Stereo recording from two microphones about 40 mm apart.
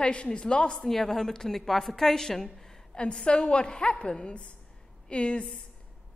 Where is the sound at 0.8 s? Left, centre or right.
Centre.